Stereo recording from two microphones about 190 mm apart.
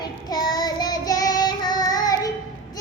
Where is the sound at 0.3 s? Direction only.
20° left (ahead or behind).